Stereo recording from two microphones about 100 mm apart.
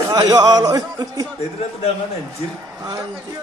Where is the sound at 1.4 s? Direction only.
90° left.